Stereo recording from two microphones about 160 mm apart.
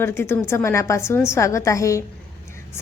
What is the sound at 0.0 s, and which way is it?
A woman's voice, 15° left (ahead or behind).